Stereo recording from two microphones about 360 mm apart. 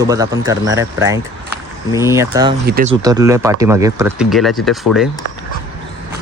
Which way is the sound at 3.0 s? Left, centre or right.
Centre.